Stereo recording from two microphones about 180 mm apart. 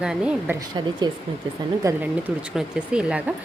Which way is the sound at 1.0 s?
25° right (ahead or behind).